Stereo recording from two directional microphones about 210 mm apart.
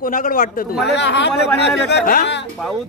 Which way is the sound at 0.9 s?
55° left (ahead or behind).